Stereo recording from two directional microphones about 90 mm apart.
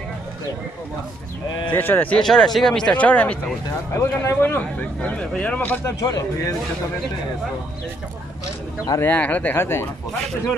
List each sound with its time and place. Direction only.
1.7 s a man's voice: 20° left (ahead or behind)
2.1 s speech: 5° left (ahead or behind)
3.9 s speech: 30° left (ahead or behind)
4.4 s a man's voice: 20° left (ahead or behind)
5.9 s speech: 40° left (ahead or behind)
9.0 s a man's voice: 20° left (ahead or behind)